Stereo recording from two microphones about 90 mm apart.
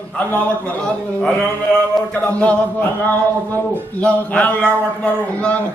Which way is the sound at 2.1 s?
15° left (ahead or behind).